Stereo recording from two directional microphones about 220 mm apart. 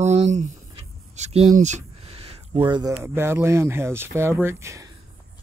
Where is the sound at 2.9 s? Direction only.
10° right (ahead or behind).